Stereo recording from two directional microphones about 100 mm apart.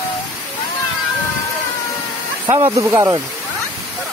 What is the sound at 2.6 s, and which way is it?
Speech, 30° right (ahead or behind).